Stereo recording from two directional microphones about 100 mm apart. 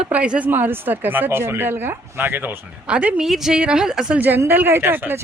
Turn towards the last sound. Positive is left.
turn(degrees=-20)  # may be behind; listen again after turning